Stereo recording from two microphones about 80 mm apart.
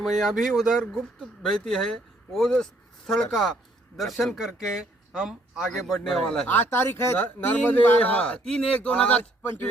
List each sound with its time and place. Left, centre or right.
0.0 s speech: centre
3.9 s speech: centre
6.5 s speech: left